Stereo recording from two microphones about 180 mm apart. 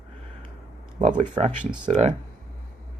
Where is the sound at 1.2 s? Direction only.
40° right (ahead or behind).